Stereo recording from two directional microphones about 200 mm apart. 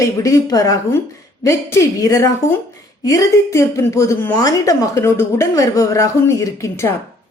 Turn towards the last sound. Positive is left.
turn(degrees=15)  # may be behind; listen again after turning